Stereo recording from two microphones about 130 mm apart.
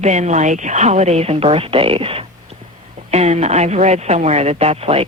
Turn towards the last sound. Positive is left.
turn(degrees=-50)  # may be behind; listen again after turning